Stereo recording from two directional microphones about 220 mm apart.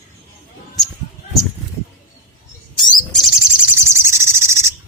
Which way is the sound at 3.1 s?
Centre (ahead or behind).